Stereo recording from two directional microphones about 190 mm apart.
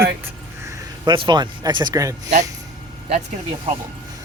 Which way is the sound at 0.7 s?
20° right (ahead or behind).